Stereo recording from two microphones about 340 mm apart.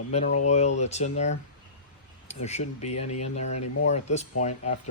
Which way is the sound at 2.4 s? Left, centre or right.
Centre.